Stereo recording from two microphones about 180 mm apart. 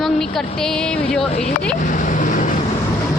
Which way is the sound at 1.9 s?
45° left (ahead or behind).